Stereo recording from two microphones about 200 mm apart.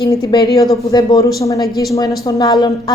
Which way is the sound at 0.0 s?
20° left (ahead or behind).